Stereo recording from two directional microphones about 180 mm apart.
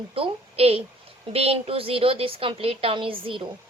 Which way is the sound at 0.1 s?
30° right (ahead or behind).